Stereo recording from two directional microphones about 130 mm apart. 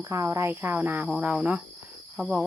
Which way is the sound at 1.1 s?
5° right (ahead or behind).